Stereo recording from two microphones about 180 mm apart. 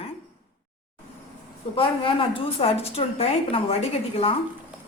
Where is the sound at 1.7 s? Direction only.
30° left (ahead or behind).